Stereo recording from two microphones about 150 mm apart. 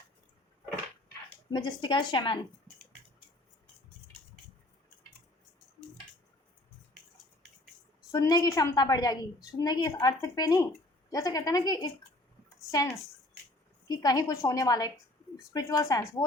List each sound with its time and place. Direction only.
1.5 s a woman's voice: 30° left (ahead or behind)
8.1 s a woman's voice: 25° left (ahead or behind)
13.8 s a woman's voice: 25° left (ahead or behind)